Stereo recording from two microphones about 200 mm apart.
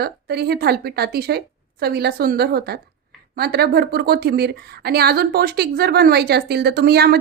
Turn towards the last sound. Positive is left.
turn(degrees=-55)  # may be behind; listen again after turning